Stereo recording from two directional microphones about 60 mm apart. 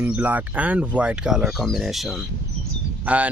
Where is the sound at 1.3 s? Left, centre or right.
Centre.